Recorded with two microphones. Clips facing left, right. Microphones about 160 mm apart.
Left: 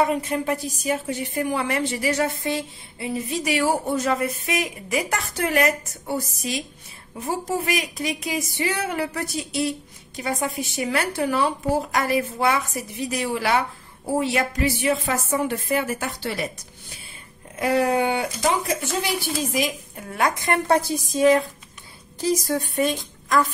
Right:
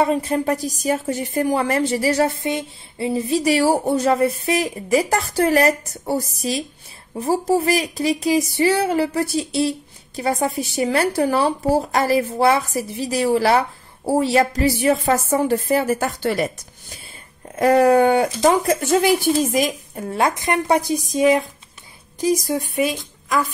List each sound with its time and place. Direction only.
0.0 s speech: 30° right (ahead or behind)
2.4 s speech: 25° right (ahead or behind); by 16.4 s 45° right (ahead or behind)
17.6 s speech: 45° right (ahead or behind)
20.2 s speech: 25° right (ahead or behind); by 23.4 s 5° right (ahead or behind)